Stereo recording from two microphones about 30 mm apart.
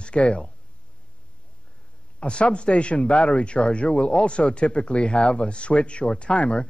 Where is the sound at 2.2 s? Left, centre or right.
Left.